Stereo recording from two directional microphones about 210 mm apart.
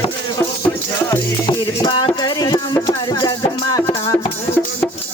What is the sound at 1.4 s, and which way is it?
Music, 20° left (ahead or behind).